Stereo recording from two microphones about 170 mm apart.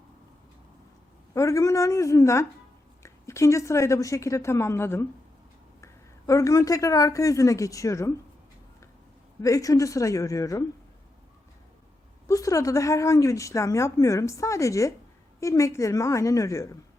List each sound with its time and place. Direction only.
1.3 s a woman's voice: 20° left (ahead or behind)
9.4 s speech: 20° left (ahead or behind)
12.3 s a woman's voice: 20° left (ahead or behind)